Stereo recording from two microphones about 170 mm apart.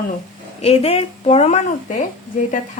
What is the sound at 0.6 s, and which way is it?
Speech, 40° left (ahead or behind).